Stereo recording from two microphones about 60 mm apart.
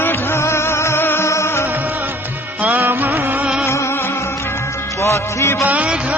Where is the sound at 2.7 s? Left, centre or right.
Right.